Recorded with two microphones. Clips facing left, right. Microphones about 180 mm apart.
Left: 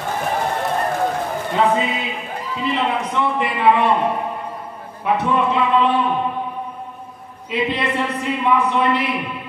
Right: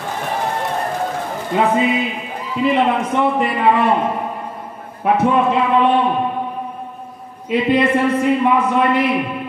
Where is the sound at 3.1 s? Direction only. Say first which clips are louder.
Right 4 dB; 45° right (ahead or behind).